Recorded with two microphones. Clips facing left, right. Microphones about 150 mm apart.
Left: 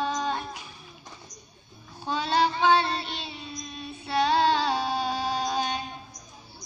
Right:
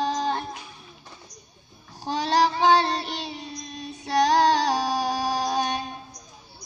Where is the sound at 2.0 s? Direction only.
35° right (ahead or behind).